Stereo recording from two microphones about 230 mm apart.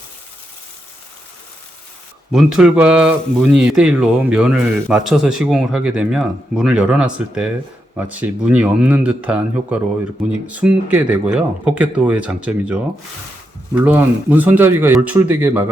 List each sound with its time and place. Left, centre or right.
2.3 s speech: centre
13.8 s speech: centre